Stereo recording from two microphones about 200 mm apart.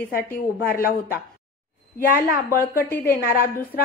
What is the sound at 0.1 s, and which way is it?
A woman's voice, 50° left (ahead or behind).